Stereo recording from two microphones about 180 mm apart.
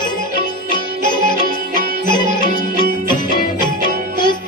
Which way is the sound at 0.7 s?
25° left (ahead or behind).